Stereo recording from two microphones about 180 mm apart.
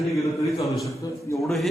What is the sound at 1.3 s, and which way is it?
Speech, 15° left (ahead or behind).